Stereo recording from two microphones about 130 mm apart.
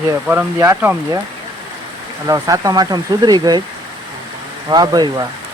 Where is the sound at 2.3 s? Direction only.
25° right (ahead or behind).